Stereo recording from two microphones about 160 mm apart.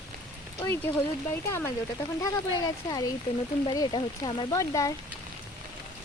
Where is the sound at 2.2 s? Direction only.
25° left (ahead or behind).